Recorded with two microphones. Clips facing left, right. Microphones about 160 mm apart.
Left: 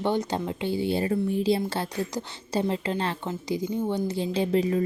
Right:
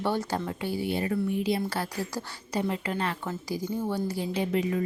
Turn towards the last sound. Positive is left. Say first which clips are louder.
# left 4 dB
turn(degrees=30)  # may be behind; listen again after turning